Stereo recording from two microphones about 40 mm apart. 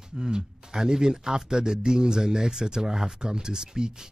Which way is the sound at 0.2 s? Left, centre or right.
Centre.